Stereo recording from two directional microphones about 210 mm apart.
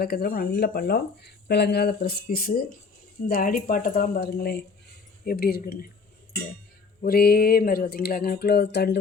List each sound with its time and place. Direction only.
0.0 s speech: 45° left (ahead or behind)
7.0 s speech: 45° left (ahead or behind)